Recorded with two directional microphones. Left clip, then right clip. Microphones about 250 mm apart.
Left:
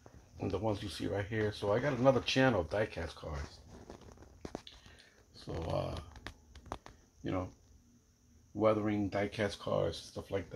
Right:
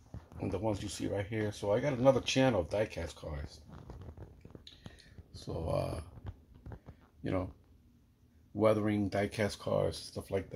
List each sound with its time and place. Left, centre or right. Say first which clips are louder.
0.4 s speech: even; centre
5.3 s speech: right 2 dB; right
8.5 s speech: right 1 dB; right